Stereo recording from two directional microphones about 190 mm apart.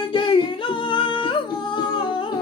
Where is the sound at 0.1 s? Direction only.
25° left (ahead or behind).